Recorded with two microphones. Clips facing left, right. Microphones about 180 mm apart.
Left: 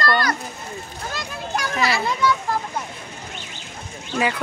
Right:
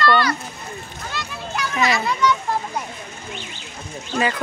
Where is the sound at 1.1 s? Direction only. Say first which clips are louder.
Left 1 dB; 40° left (ahead or behind).